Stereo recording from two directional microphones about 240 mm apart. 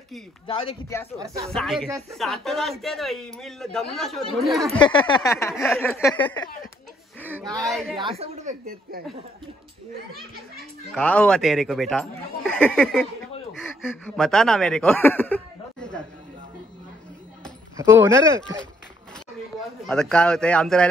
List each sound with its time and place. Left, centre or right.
0.5 s speech: left
1.5 s a man's voice: centre
4.7 s speech: centre
7.2 s a sound: centre
7.6 s a man's voice: centre
8.2 s speech: right
10.9 s a man's voice: centre
17.7 s speech: centre
19.9 s a man's voice: centre